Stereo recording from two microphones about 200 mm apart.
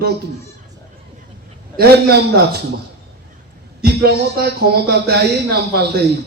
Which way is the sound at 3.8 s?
55° right (ahead or behind).